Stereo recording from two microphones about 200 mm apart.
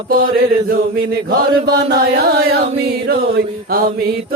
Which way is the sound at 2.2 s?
50° right (ahead or behind).